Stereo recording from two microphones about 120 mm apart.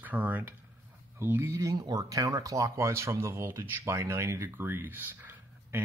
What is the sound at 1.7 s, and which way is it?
Speech, 30° right (ahead or behind).